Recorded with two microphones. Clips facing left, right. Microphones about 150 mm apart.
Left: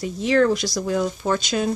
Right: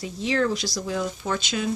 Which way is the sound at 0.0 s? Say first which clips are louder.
Left 6 dB; 55° left (ahead or behind).